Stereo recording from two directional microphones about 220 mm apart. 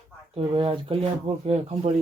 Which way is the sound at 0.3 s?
25° right (ahead or behind).